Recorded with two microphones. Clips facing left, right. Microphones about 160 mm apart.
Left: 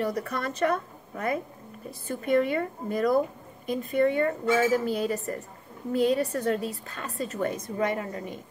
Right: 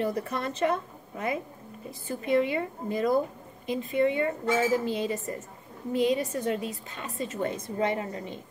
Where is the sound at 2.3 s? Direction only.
20° right (ahead or behind).